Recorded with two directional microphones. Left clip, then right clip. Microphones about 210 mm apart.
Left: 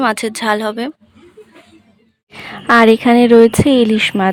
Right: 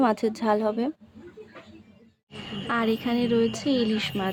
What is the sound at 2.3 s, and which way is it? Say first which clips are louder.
Speech: left 17 dB; 50° left (ahead or behind).